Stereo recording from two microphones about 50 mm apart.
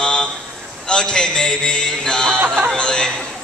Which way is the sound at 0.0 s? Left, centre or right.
Centre.